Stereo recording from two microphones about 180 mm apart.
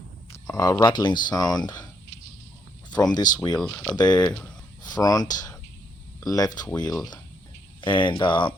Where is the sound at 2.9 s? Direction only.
20° left (ahead or behind).